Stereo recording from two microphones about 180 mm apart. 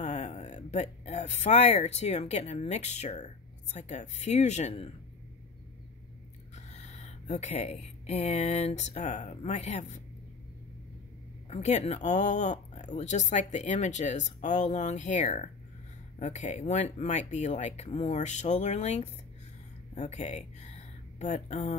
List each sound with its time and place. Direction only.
0.0 s speech: 40° left (ahead or behind)
6.5 s speech: 40° left (ahead or behind)
11.4 s speech: 40° left (ahead or behind)